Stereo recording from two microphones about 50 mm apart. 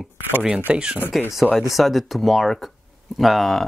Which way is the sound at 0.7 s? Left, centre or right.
Right.